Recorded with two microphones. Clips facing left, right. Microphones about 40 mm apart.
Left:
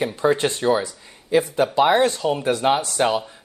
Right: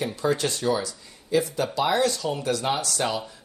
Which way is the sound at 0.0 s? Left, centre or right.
Left.